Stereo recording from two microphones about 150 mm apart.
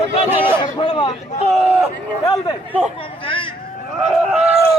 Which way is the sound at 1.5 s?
5° right (ahead or behind).